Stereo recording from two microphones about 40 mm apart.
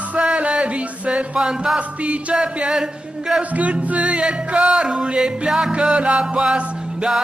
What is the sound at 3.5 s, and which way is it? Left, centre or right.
Music, right.